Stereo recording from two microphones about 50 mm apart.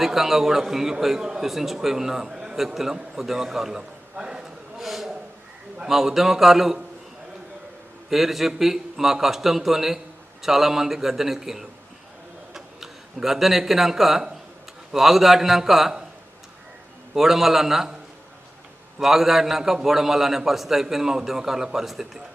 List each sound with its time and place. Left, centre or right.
0.0 s a man's voice: centre
4.1 s a sound: centre
4.8 s a sound: centre
5.9 s a man's voice: centre
8.1 s a man's voice: centre
17.2 s a man's voice: centre
18.9 s a man's voice: centre